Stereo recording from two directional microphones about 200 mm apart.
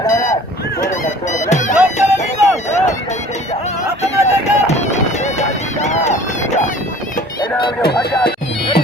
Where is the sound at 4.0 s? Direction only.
35° left (ahead or behind).